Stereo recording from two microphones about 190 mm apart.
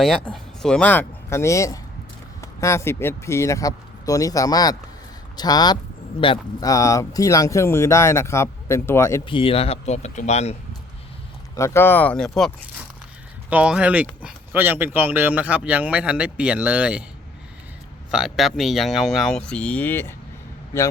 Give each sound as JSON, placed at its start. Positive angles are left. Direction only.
{"t": 0.0, "sound": "speech", "side_deg": 0}
{"t": 9.2, "sound": "speech", "side_deg": 25}
{"t": 11.5, "sound": "speech", "side_deg": 15}
{"t": 13.5, "sound": "speech", "side_deg": -5}
{"t": 18.1, "sound": "speech", "side_deg": 0}